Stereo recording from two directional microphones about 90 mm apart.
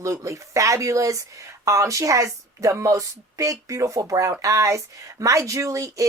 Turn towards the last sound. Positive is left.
turn(degrees=-35)  # may be behind; listen again after turning